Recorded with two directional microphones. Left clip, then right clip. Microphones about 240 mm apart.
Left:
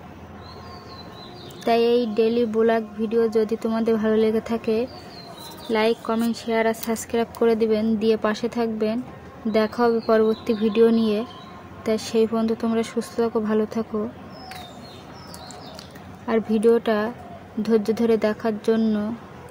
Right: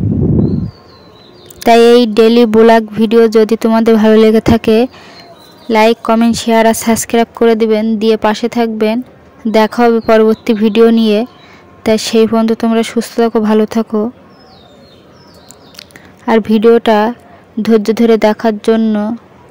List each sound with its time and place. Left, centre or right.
1.6 s speech: right
16.3 s speech: right